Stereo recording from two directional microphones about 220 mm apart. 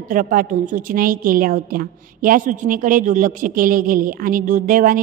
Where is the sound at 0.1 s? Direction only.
40° right (ahead or behind).